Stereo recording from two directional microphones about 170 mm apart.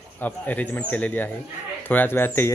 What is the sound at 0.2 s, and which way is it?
Speech, 10° left (ahead or behind).